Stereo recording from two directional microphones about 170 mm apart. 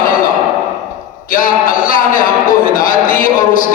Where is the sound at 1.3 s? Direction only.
55° left (ahead or behind).